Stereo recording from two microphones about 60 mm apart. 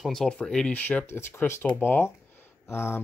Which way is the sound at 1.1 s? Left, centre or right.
Left.